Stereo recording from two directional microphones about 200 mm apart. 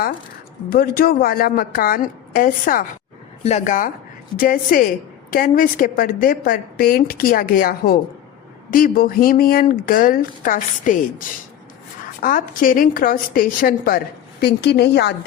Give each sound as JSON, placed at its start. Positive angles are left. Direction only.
{"t": 0.7, "sound": "a woman's voice", "side_deg": 50}
{"t": 12.2, "sound": "a woman's voice", "side_deg": 45}